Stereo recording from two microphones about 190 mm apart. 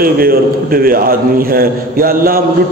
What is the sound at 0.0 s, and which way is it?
A man's voice, 50° right (ahead or behind).